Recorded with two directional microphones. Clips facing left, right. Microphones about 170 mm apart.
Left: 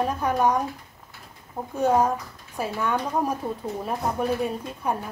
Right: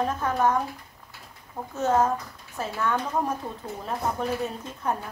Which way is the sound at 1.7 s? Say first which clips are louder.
Left 2 dB; 15° left (ahead or behind).